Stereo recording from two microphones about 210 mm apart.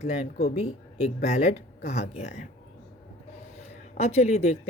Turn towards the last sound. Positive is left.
turn(degrees=30)  # may be behind; listen again after turning